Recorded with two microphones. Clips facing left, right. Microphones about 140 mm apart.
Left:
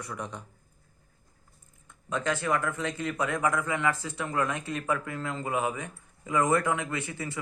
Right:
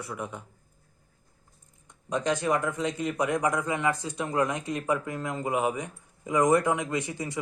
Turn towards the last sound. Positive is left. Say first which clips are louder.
# right 3 dB
turn(degrees=-15)  # may be behind; listen again after turning